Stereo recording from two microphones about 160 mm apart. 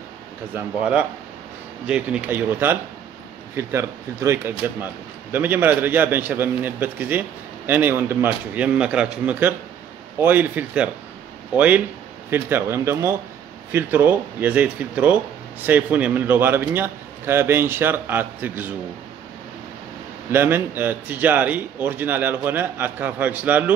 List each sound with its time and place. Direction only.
0.6 s a man's voice: 10° right (ahead or behind)
20.2 s a man's voice: 15° right (ahead or behind)